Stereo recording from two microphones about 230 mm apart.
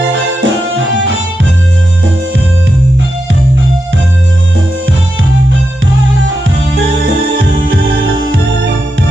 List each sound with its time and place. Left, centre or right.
0.4 s music: right